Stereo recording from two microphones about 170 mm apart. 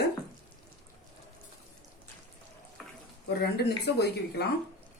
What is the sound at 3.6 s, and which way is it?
Speech, 75° left (ahead or behind).